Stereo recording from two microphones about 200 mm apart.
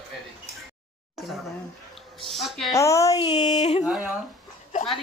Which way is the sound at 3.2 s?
35° left (ahead or behind).